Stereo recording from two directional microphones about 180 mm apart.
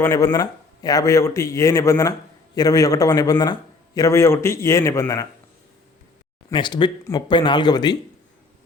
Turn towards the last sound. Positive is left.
turn(degrees=25)  # may be behind; listen again after turning